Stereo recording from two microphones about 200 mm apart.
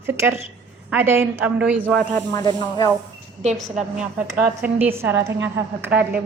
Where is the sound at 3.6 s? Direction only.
Centre (ahead or behind).